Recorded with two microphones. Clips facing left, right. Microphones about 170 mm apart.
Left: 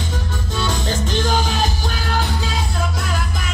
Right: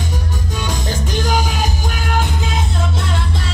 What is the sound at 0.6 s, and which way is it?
Music, 15° right (ahead or behind).